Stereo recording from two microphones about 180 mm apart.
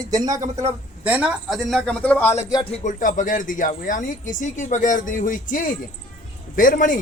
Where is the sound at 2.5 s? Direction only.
30° left (ahead or behind); by 7.0 s 45° left (ahead or behind).